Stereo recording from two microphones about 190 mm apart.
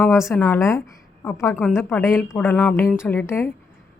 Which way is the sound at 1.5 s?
Centre (ahead or behind).